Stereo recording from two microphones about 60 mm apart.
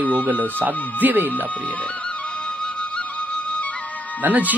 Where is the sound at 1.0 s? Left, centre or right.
Right.